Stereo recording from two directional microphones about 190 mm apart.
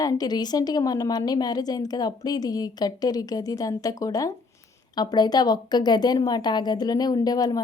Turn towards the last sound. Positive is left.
turn(degrees=20)  # may be behind; listen again after turning